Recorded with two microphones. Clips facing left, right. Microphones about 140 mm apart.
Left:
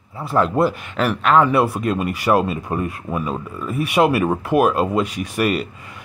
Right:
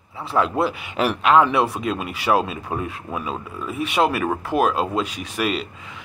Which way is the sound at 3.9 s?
10° left (ahead or behind).